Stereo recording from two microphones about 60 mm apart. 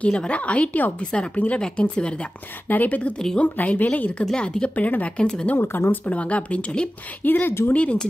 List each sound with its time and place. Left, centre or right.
0.0 s a woman's voice: centre
1.3 s a woman's voice: left
2.7 s a woman's voice: left
5.6 s speech: left
6.0 s a woman's voice: left
7.2 s speech: left
7.7 s a woman's voice: centre